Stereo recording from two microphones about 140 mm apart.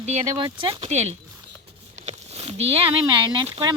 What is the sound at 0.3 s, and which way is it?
Speech, 35° right (ahead or behind).